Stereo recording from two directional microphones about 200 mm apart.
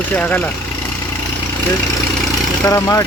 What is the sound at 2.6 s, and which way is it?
Speech, 15° left (ahead or behind).